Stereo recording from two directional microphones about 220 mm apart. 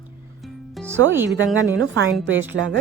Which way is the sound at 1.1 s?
10° right (ahead or behind).